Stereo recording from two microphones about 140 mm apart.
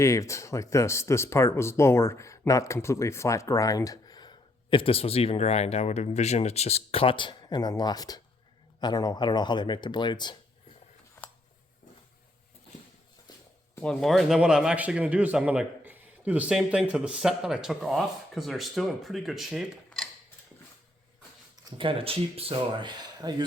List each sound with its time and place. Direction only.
0.0 s speech: 20° left (ahead or behind)
13.7 s a man's voice: 5° left (ahead or behind)
21.5 s speech: 35° right (ahead or behind)